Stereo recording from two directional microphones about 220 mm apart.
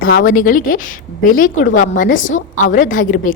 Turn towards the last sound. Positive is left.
turn(degrees=35)  # may be behind; listen again after turning